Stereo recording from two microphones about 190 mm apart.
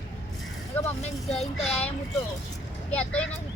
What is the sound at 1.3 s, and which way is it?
Speech, centre (ahead or behind).